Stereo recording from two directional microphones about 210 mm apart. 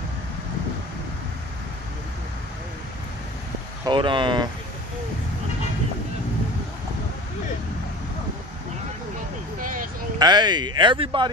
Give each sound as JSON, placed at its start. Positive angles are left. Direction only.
{"t": 3.8, "sound": "speech", "side_deg": -25}
{"t": 10.1, "sound": "speech", "side_deg": -20}